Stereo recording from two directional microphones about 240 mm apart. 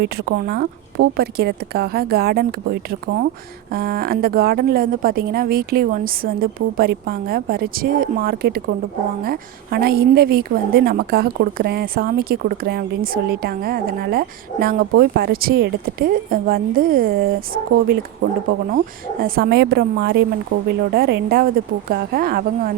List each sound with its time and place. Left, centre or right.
0.4 s a woman's voice: right